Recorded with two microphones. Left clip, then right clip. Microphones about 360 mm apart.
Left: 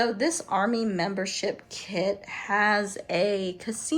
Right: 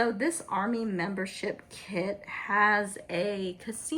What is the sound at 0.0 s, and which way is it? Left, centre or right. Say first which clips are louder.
Speech: left 3 dB; centre.